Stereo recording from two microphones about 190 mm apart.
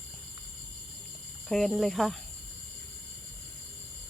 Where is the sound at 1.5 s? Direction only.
Centre (ahead or behind).